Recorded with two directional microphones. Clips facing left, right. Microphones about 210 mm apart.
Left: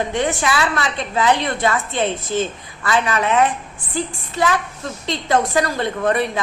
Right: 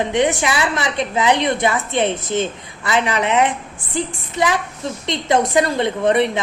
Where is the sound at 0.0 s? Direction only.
20° right (ahead or behind).